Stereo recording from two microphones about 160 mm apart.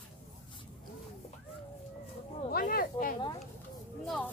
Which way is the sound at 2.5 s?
65° left (ahead or behind).